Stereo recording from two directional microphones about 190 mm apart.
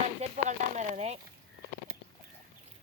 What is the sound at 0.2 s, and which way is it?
Speech, 35° right (ahead or behind).